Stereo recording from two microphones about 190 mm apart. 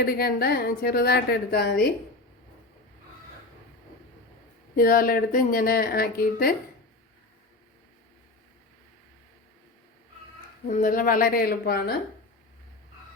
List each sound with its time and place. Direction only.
0.0 s a woman's voice: 50° left (ahead or behind)
4.8 s a woman's voice: 50° left (ahead or behind)
10.7 s a woman's voice: 45° left (ahead or behind)